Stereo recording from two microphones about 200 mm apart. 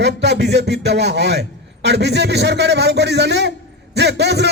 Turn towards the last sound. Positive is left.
turn(degrees=-60)  # may be behind; listen again after turning